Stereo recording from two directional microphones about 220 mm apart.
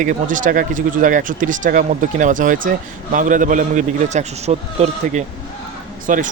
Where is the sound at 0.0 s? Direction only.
35° right (ahead or behind).